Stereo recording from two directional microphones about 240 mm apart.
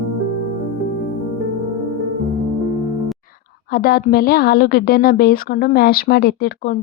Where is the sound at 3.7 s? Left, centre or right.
Left.